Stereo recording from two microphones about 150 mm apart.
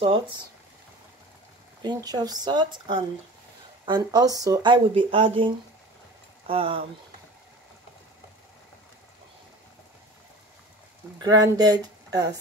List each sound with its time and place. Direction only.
1.8 s speech: 30° right (ahead or behind)
11.1 s speech: 25° right (ahead or behind)